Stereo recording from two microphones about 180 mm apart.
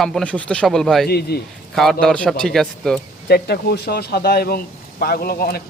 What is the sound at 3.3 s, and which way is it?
Speech, 60° left (ahead or behind).